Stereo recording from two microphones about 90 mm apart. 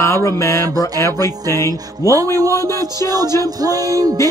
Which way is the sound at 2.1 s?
40° right (ahead or behind).